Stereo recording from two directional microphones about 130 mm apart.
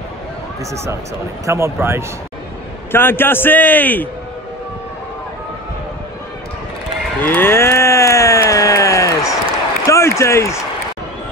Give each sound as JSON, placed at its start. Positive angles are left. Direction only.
{"t": 1.4, "sound": "speech", "side_deg": -20}
{"t": 2.9, "sound": "a man's voice", "side_deg": 15}
{"t": 7.2, "sound": "a sound", "side_deg": 15}
{"t": 9.8, "sound": "applause", "side_deg": 20}